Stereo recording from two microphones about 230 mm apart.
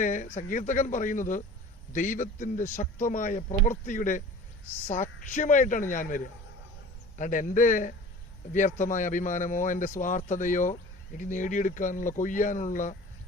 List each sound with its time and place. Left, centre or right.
0.0 s speech: left